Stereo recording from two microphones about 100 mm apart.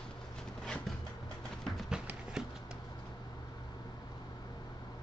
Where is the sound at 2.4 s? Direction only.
5° right (ahead or behind).